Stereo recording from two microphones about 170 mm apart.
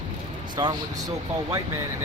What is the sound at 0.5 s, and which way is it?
Speech, 25° right (ahead or behind).